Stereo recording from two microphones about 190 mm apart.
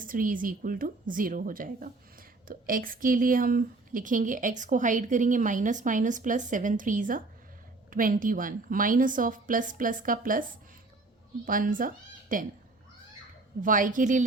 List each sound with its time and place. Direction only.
0.0 s a woman's voice: 45° right (ahead or behind)
11.4 s speech: 45° right (ahead or behind)
13.6 s a woman's voice: 45° right (ahead or behind)